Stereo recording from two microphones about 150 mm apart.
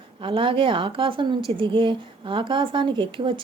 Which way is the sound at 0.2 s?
35° right (ahead or behind).